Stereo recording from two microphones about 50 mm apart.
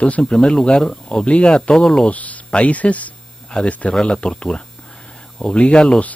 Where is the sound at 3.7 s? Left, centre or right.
Left.